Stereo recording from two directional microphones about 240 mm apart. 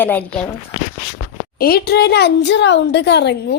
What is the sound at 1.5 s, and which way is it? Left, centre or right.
A woman's voice, left.